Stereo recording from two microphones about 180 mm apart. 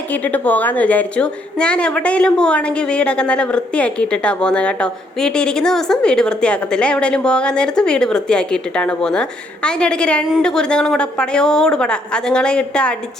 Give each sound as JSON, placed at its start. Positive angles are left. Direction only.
{"t": 0.1, "sound": "a woman's voice", "side_deg": 10}